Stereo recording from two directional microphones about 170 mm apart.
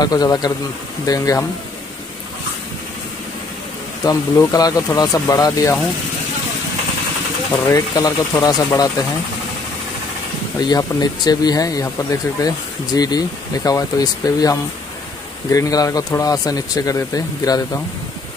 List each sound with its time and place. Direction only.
0.0 s speech: 20° left (ahead or behind)
4.0 s speech: 20° left (ahead or behind)
7.7 s speech: 20° left (ahead or behind)
10.6 s speech: 25° left (ahead or behind)